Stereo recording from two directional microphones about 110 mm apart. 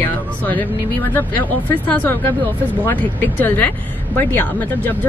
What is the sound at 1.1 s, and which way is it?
Speech, 15° left (ahead or behind).